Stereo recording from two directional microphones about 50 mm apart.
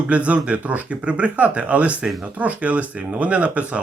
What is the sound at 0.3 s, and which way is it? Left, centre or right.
Speech, right.